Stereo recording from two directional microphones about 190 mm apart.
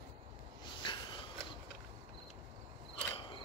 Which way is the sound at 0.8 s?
25° left (ahead or behind).